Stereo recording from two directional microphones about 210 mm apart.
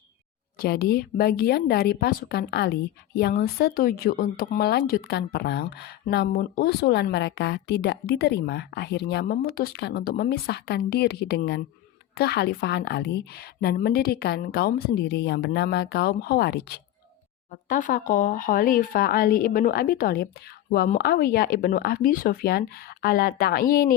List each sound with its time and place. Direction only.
0.6 s speech: 45° left (ahead or behind)
17.5 s speech: 40° left (ahead or behind)